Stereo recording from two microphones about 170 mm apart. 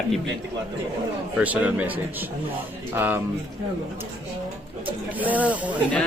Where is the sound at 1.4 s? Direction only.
10° right (ahead or behind).